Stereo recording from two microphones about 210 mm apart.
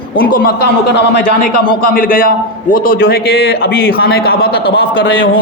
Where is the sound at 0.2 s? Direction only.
45° left (ahead or behind).